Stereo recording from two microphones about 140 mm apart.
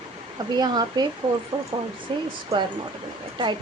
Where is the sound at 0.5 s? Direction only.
30° right (ahead or behind).